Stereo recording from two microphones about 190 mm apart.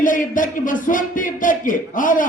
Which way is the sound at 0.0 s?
45° left (ahead or behind).